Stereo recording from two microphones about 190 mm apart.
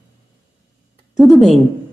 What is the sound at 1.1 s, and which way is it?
Speech, centre (ahead or behind).